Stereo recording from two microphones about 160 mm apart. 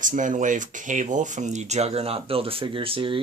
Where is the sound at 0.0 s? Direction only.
55° right (ahead or behind).